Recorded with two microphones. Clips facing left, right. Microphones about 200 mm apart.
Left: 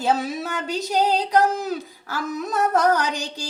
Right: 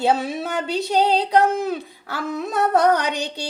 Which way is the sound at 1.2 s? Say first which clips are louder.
Right 2 dB; 60° right (ahead or behind).